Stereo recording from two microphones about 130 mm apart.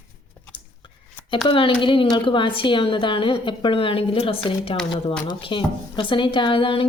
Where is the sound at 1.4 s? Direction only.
40° left (ahead or behind).